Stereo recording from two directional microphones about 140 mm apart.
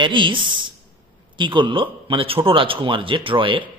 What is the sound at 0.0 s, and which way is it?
A woman's voice, 35° right (ahead or behind).